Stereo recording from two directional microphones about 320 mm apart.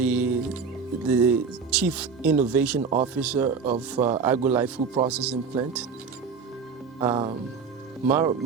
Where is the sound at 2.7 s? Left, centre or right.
Right.